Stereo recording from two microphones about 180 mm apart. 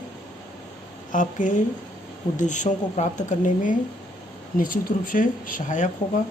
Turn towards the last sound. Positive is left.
turn(degrees=45)  # may be behind; listen again after turning